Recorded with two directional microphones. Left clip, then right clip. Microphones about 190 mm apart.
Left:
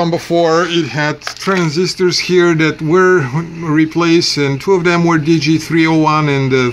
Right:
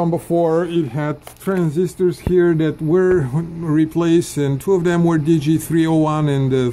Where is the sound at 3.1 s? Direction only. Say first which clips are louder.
Left 5 dB; 15° left (ahead or behind).